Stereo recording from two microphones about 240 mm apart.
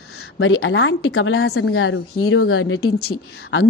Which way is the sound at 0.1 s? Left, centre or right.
Left.